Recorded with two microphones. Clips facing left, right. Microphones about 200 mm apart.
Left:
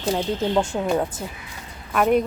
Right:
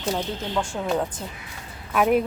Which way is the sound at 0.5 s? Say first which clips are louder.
Left 4 dB; 20° left (ahead or behind).